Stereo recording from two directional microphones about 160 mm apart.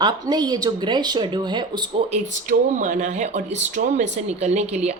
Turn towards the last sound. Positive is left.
turn(degrees=-45)  # may be behind; listen again after turning